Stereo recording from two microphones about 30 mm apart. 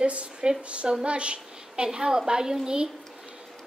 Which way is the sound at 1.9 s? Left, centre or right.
Right.